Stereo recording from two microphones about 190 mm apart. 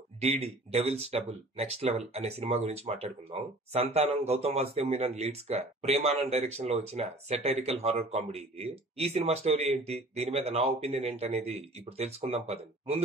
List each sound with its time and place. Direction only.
0.2 s speech: 35° right (ahead or behind)